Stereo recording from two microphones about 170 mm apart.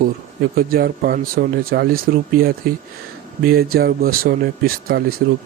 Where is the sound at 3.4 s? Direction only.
60° right (ahead or behind).